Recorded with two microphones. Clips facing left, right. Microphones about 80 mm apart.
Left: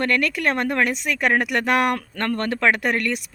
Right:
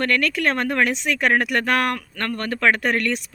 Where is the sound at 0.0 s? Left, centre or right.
Centre.